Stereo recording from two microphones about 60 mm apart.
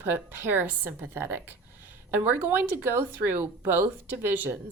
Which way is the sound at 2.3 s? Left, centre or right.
Right.